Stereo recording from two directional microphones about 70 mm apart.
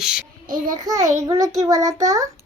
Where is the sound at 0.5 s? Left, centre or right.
Right.